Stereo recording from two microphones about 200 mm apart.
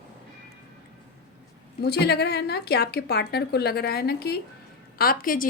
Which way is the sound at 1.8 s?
55° left (ahead or behind).